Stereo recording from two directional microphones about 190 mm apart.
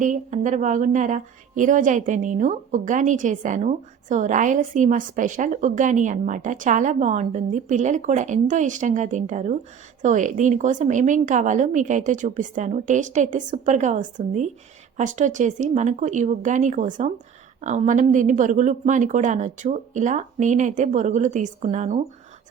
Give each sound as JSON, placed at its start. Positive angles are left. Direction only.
{"t": 0.0, "sound": "a woman's voice", "side_deg": -40}